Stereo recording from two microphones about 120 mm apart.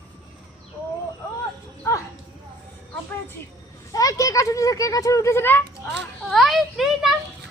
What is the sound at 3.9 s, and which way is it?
Speech, 30° left (ahead or behind).